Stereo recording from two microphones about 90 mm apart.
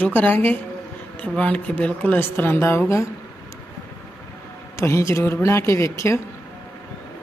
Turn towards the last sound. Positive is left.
turn(degrees=30)  # may be behind; listen again after turning